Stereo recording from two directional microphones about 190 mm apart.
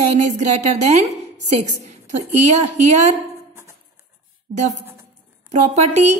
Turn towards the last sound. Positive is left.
turn(degrees=-35)  # may be behind; listen again after turning